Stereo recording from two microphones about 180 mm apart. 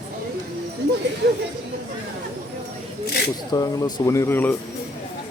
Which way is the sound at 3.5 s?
20° left (ahead or behind).